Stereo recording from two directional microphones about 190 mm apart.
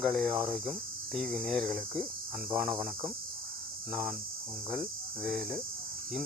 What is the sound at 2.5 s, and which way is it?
Speech, 15° right (ahead or behind).